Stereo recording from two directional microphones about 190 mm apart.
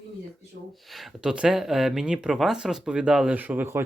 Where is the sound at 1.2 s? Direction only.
5° right (ahead or behind).